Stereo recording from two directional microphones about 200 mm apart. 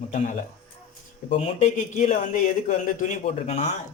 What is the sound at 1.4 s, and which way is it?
Speech, 35° left (ahead or behind).